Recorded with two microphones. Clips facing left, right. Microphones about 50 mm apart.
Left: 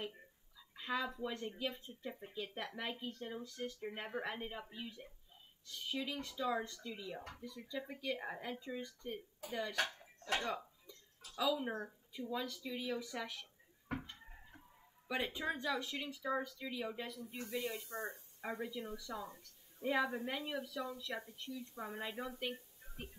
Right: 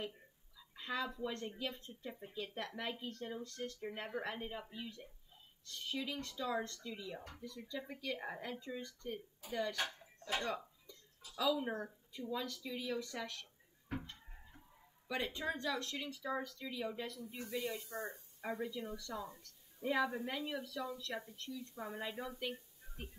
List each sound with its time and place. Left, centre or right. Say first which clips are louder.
0.6 s speech: left 1 dB; centre
10.4 s a sound: even; centre
11.6 s speech: right 1 dB; centre
15.0 s a woman's voice: left 1 dB; centre
17.9 s speech: even; left
18.4 s a woman's voice: right 1 dB; centre